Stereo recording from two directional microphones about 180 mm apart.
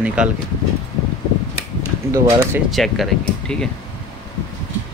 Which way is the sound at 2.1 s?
15° right (ahead or behind).